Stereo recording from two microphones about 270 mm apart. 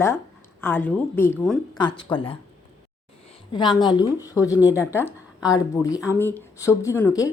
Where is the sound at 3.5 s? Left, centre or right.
Centre.